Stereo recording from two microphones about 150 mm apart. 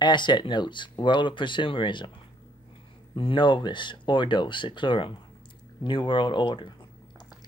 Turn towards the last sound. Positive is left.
turn(degrees=30)  # may be behind; listen again after turning